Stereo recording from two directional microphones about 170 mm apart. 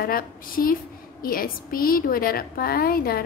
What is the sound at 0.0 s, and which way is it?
A woman's voice, 60° left (ahead or behind).